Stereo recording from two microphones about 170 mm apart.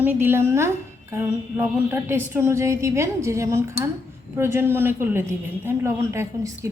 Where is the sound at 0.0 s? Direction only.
10° right (ahead or behind).